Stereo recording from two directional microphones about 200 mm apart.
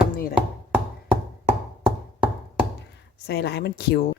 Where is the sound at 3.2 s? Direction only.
55° left (ahead or behind).